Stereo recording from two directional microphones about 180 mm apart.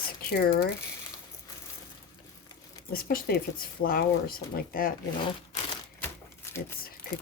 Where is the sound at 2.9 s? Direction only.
55° left (ahead or behind).